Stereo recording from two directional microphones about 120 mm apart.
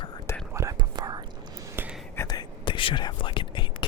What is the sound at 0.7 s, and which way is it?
Whispering, 35° right (ahead or behind).